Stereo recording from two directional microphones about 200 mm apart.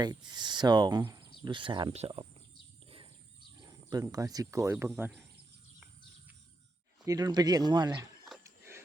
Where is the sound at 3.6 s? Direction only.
20° right (ahead or behind).